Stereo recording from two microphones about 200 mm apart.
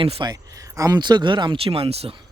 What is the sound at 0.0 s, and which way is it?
Speech, 25° right (ahead or behind).